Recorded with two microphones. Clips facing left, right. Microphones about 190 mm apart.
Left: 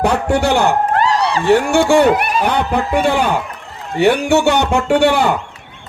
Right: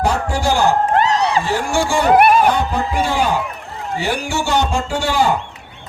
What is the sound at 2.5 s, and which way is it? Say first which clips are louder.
A man's voice: left 2 dB; 65° left (ahead or behind).